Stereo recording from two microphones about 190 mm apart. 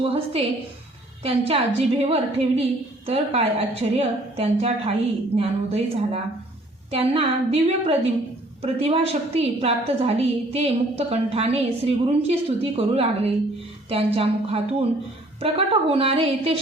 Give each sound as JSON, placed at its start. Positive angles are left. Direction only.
{"t": 0.0, "sound": "a woman's voice", "side_deg": -30}